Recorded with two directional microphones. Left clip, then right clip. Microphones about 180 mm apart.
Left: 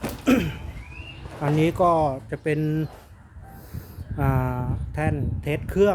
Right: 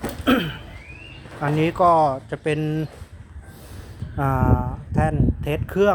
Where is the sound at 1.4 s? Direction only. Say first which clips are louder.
Right 2 dB; 15° left (ahead or behind).